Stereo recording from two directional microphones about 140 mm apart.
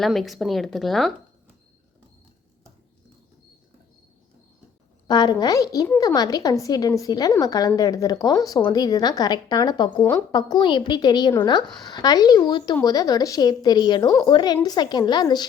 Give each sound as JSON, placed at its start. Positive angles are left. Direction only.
{"t": 0.0, "sound": "speech", "side_deg": 0}
{"t": 5.0, "sound": "a woman's voice", "side_deg": 30}
{"t": 10.0, "sound": "a woman's voice", "side_deg": 15}
{"t": 10.3, "sound": "a woman's voice", "side_deg": 35}